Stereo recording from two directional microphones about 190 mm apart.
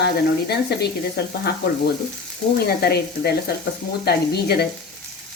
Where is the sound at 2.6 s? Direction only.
55° left (ahead or behind).